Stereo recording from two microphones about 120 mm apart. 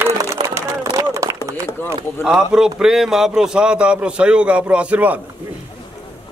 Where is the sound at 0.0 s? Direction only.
25° right (ahead or behind).